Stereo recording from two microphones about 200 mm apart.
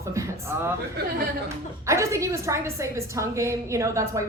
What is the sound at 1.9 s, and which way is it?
A woman's voice, 15° right (ahead or behind).